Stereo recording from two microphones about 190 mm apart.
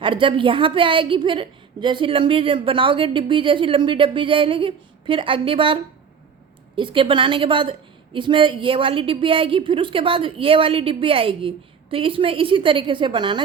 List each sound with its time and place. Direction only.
0.0 s a woman's voice: 25° right (ahead or behind)